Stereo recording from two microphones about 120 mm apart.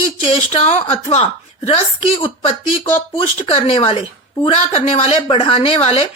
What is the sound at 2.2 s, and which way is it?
Speech, 45° left (ahead or behind).